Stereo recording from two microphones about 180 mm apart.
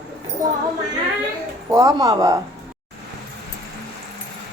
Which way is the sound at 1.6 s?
20° right (ahead or behind).